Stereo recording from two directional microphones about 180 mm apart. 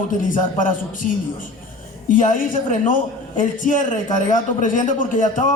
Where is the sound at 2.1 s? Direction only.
45° left (ahead or behind).